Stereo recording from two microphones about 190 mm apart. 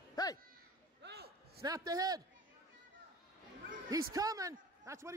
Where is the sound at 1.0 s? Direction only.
60° right (ahead or behind).